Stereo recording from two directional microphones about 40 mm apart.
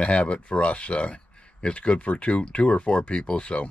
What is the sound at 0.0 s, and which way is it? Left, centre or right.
Speech, left.